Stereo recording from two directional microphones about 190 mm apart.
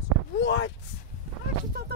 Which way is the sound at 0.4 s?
70° left (ahead or behind).